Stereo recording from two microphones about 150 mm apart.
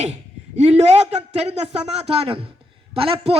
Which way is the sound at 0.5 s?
45° right (ahead or behind).